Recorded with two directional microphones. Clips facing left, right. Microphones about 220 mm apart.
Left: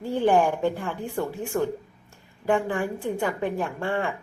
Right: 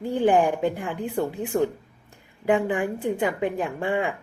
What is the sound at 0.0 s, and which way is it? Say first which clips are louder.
Speech: right 1 dB; 15° right (ahead or behind).